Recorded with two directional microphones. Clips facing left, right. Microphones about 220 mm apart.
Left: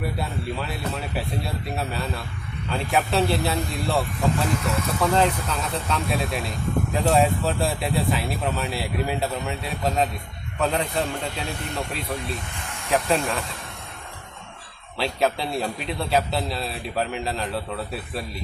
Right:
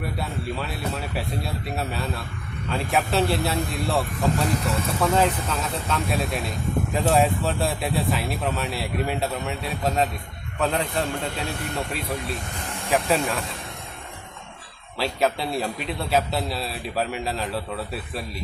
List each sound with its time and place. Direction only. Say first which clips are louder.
0.0 s a man's voice: left 1 dB; centre (ahead or behind)
4.4 s speech: even; 35° right (ahead or behind)
4.9 s a man's voice: even; centre (ahead or behind)
14.9 s a man's voice: even; centre (ahead or behind)